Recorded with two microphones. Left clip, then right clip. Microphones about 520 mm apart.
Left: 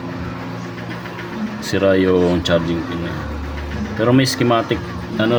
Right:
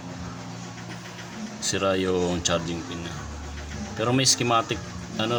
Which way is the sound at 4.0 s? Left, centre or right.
Right.